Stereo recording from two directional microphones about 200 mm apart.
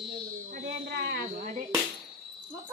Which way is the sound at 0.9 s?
55° right (ahead or behind).